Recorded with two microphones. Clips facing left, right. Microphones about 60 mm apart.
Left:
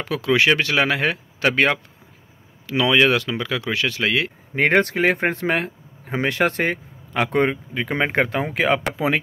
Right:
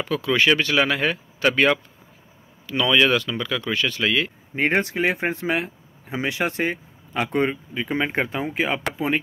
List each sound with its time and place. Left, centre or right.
0.0 s speech: left
0.7 s speech: left
2.6 s speech: left
2.9 s speech: left
3.6 s speech: left
4.0 s speech: left
8.9 s speech: left